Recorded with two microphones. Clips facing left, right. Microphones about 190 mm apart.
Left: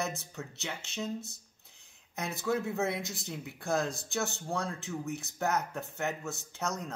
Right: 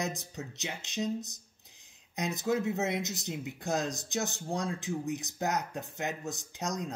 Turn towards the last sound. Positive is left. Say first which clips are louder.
# even
turn(degrees=-15)  # may be behind; listen again after turning